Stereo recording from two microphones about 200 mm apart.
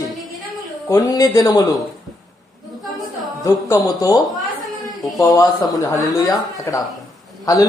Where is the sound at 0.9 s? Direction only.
15° left (ahead or behind).